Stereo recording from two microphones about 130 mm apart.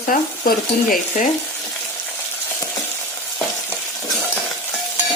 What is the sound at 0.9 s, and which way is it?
Speech, 70° left (ahead or behind).